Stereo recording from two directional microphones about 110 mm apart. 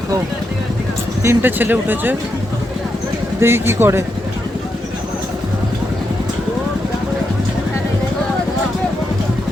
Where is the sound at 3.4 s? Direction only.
20° right (ahead or behind).